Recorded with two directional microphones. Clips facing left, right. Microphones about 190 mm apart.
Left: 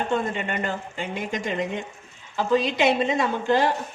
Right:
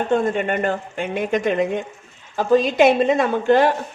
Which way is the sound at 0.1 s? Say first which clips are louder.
Right 6 dB; 50° right (ahead or behind).